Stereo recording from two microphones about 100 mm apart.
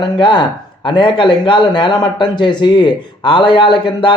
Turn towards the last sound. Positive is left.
turn(degrees=50)  # may be behind; listen again after turning